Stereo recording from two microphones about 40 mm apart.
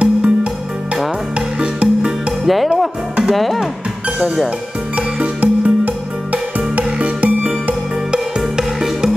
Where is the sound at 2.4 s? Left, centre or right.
Centre.